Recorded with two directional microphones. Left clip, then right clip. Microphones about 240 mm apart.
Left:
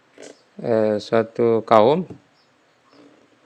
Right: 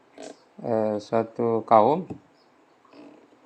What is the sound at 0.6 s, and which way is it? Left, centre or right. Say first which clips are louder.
Speech: left 6 dB; left.